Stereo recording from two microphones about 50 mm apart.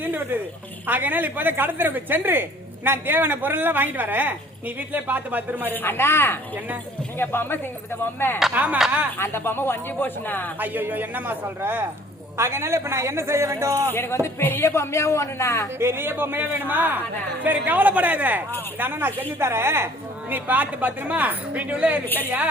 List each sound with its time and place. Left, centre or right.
0.0 s speech: right
5.7 s speech: left
8.5 s speech: right
9.1 s speech: left
10.6 s speech: right
12.4 s a man's voice: right
13.9 s speech: left
14.6 s speech: left
15.8 s speech: right
18.8 s speech: right
19.4 s a man's voice: right
20.3 s speech: right